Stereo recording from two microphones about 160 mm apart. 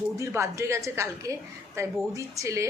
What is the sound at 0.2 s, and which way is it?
A woman's voice, 20° right (ahead or behind).